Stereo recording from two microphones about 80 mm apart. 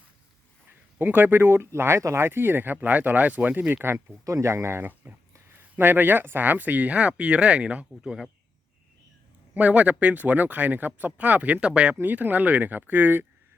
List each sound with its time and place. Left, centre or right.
0.9 s speech: right
4.3 s speech: right; by 8.1 s centre
9.6 s speech: centre